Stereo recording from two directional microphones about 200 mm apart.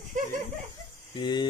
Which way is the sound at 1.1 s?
20° left (ahead or behind).